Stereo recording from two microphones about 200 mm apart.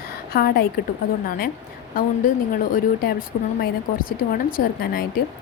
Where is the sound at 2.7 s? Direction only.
45° left (ahead or behind).